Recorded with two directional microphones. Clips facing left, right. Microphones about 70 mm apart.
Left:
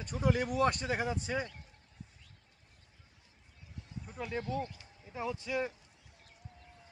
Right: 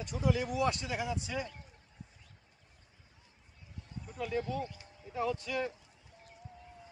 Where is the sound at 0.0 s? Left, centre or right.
Left.